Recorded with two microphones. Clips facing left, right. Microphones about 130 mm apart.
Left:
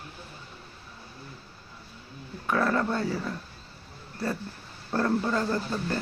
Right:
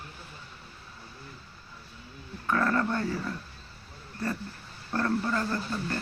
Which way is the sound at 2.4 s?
10° left (ahead or behind).